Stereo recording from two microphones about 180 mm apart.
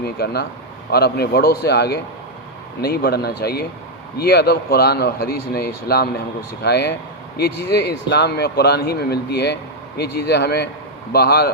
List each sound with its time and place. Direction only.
0.0 s speech: 60° left (ahead or behind)